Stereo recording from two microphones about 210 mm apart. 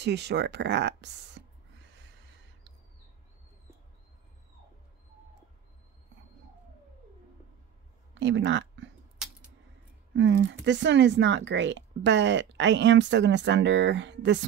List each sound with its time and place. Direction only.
0.0 s speech: 55° right (ahead or behind)
8.1 s speech: 60° right (ahead or behind)
10.1 s speech: 60° right (ahead or behind)